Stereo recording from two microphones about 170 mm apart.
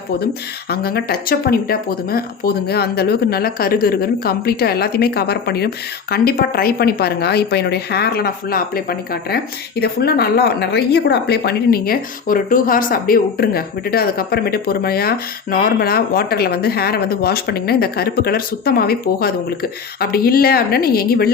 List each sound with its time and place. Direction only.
0.7 s speech: 65° left (ahead or behind)